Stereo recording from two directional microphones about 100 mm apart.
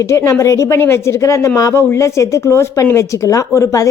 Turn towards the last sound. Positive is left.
turn(degrees=30)  # may be behind; listen again after turning